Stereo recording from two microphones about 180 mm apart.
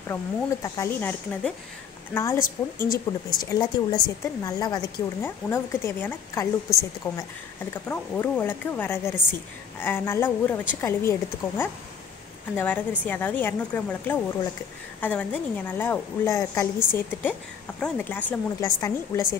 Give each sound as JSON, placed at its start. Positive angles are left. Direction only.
{"t": 0.1, "sound": "a woman's voice", "side_deg": 15}
{"t": 7.7, "sound": "a woman's voice", "side_deg": 10}